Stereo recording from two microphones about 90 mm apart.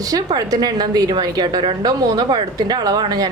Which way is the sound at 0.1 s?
45° right (ahead or behind).